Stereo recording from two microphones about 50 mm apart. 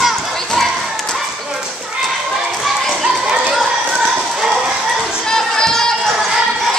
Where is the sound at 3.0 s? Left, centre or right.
Centre.